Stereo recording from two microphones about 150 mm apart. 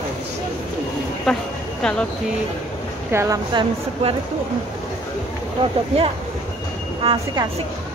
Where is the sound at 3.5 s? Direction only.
35° right (ahead or behind).